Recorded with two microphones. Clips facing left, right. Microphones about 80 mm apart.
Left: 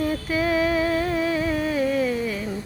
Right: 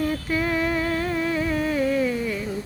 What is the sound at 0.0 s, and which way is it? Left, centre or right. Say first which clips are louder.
Music: left 1 dB; centre.